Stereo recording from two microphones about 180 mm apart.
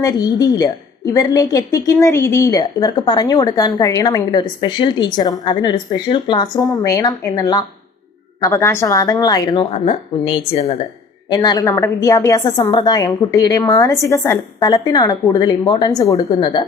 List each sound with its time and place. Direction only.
0.0 s a woman's voice: 20° left (ahead or behind)
11.3 s a woman's voice: 25° left (ahead or behind)